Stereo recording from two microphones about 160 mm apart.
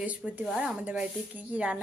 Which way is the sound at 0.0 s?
10° right (ahead or behind).